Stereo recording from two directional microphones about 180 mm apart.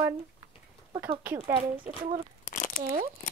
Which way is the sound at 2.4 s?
45° left (ahead or behind).